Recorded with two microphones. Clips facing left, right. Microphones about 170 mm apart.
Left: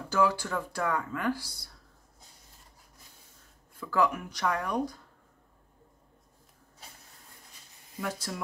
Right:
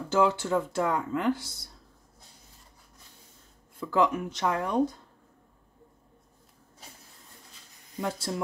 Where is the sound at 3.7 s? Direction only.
20° right (ahead or behind).